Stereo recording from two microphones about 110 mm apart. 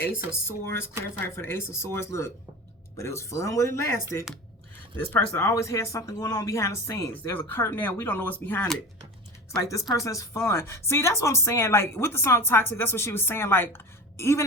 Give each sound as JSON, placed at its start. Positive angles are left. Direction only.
{"t": 0.3, "sound": "speech", "side_deg": 20}
{"t": 5.1, "sound": "speech", "side_deg": 25}
{"t": 7.1, "sound": "speech", "side_deg": 20}
{"t": 9.6, "sound": "speech", "side_deg": 30}